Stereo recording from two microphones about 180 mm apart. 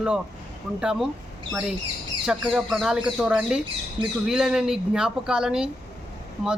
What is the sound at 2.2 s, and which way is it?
Speech, 5° right (ahead or behind).